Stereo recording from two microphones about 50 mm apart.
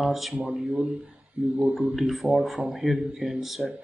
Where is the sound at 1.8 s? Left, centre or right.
Centre.